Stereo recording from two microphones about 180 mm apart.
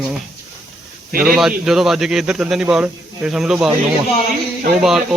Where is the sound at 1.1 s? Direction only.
55° right (ahead or behind).